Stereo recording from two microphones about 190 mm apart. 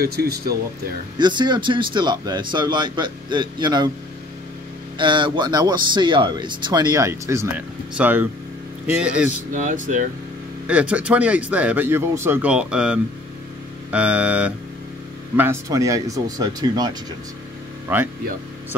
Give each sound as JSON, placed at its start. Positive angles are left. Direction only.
{"t": 0.0, "sound": "speech", "side_deg": -55}
{"t": 1.1, "sound": "speech", "side_deg": -25}
{"t": 4.9, "sound": "speech", "side_deg": -25}
{"t": 9.5, "sound": "speech", "side_deg": -40}
{"t": 10.7, "sound": "speech", "side_deg": -5}